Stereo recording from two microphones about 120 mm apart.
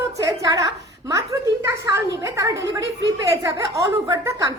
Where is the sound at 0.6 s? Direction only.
30° right (ahead or behind).